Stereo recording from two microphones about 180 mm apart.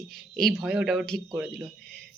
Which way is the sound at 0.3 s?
Centre (ahead or behind).